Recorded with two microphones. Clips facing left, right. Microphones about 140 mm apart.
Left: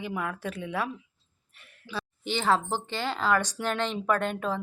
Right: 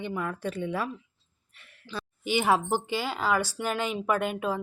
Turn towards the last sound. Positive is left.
turn(degrees=-5)  # may be behind; listen again after turning